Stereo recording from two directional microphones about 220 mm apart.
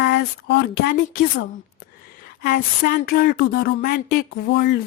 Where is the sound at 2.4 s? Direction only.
45° left (ahead or behind).